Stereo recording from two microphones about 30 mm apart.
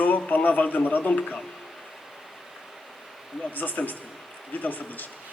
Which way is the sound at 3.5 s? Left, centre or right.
Left.